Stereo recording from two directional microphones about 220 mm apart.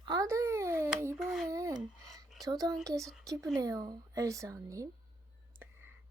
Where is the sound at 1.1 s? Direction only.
Centre (ahead or behind).